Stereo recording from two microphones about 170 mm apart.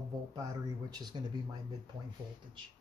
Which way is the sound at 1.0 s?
25° right (ahead or behind).